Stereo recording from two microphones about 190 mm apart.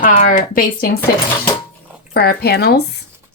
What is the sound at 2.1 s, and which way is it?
Speech, 55° left (ahead or behind).